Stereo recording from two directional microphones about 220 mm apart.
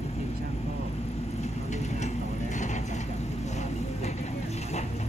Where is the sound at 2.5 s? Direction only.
35° left (ahead or behind).